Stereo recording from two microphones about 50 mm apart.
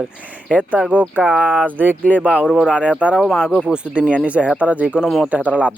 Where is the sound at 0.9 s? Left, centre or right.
Right.